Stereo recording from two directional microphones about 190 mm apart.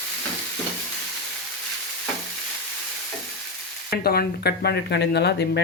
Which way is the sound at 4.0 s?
55° left (ahead or behind).